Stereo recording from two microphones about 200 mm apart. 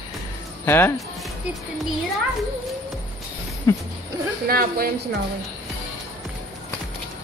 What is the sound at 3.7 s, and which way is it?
Speech, 15° left (ahead or behind).